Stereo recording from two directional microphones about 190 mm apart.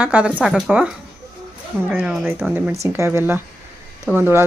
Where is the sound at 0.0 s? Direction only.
5° right (ahead or behind).